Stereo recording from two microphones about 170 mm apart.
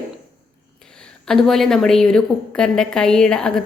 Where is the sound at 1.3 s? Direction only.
Centre (ahead or behind).